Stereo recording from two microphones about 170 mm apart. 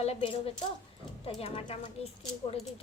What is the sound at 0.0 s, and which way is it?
A woman's voice, 35° left (ahead or behind).